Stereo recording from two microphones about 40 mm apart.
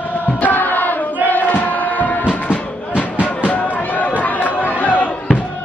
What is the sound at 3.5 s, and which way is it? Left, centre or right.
Chatter, left.